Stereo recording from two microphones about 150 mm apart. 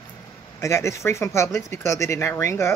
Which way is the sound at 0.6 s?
20° left (ahead or behind).